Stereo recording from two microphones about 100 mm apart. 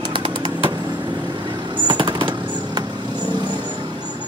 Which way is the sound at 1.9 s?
50° right (ahead or behind).